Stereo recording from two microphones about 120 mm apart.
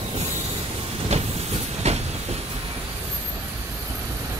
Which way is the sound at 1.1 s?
65° right (ahead or behind).